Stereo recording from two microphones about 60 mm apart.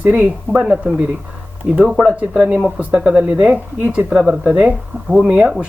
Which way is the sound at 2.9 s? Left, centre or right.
Centre.